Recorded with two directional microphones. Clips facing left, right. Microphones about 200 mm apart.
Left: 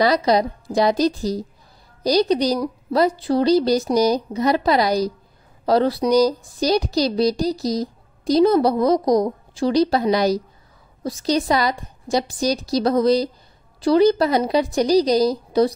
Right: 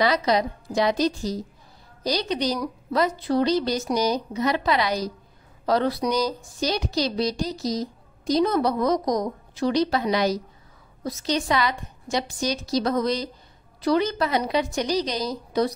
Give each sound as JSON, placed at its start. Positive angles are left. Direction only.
{"t": 0.0, "sound": "a woman's voice", "side_deg": 35}